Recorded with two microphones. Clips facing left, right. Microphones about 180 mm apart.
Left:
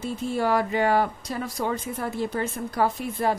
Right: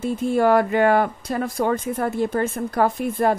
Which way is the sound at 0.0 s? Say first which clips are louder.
Right 7 dB; 55° right (ahead or behind).